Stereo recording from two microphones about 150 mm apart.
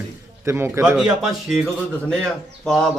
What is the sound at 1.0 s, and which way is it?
Speech, centre (ahead or behind).